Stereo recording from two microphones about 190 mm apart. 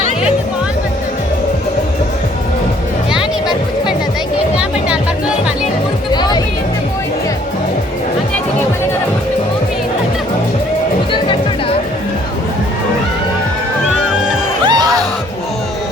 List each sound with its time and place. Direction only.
6.1 s music: 20° left (ahead or behind)
14.6 s music: 20° right (ahead or behind)